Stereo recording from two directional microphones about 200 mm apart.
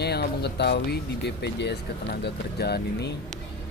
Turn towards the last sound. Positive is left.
turn(degrees=55)  # may be behind; listen again after turning